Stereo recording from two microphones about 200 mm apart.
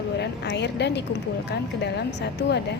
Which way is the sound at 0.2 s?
60° left (ahead or behind).